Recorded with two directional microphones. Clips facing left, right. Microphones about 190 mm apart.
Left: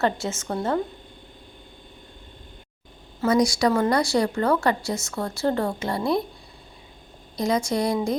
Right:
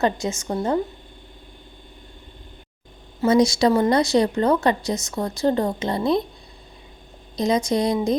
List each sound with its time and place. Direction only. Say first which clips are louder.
0.0 s a woman's voice: right 2 dB; 15° right (ahead or behind)
3.2 s speech: right 3 dB; 25° right (ahead or behind)
7.3 s speech: right 3 dB; 20° right (ahead or behind)